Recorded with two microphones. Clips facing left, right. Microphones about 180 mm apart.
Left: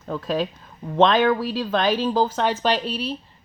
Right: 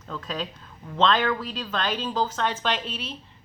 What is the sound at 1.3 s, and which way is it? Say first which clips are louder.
A woman's voice: left 7 dB; 35° left (ahead or behind).